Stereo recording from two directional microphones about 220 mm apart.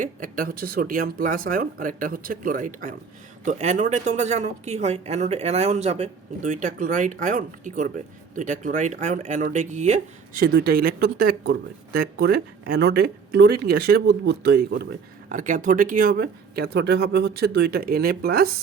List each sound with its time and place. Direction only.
0.0 s a woman's voice: 40° right (ahead or behind)